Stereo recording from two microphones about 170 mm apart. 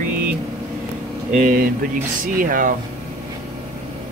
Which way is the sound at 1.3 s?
55° right (ahead or behind).